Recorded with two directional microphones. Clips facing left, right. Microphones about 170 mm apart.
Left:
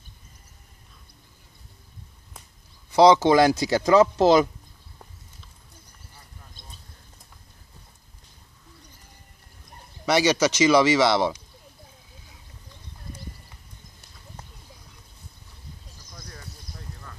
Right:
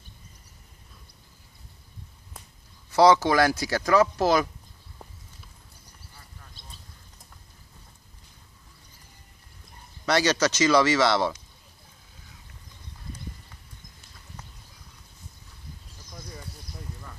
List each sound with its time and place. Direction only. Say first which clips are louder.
2.9 s speech: left 3 dB; 20° left (ahead or behind)
10.0 s speech: left 3 dB; 10° left (ahead or behind)
16.2 s a sound: right 3 dB; 10° right (ahead or behind)